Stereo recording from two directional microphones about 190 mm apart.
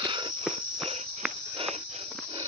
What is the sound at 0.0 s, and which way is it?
Insect, 25° right (ahead or behind).